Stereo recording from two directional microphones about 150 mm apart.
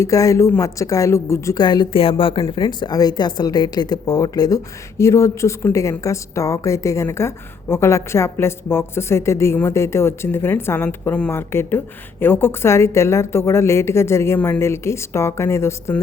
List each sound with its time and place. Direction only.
0.0 s a woman's voice: 20° left (ahead or behind)